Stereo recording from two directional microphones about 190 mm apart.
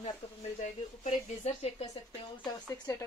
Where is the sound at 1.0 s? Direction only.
40° left (ahead or behind).